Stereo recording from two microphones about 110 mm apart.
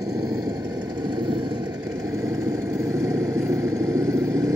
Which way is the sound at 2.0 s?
30° right (ahead or behind).